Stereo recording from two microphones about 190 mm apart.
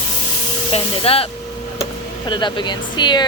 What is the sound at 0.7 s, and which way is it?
Speech, 30° left (ahead or behind).